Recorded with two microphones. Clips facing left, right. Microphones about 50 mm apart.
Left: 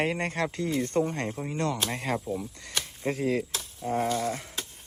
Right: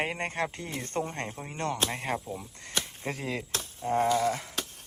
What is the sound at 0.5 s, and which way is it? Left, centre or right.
Speech, right.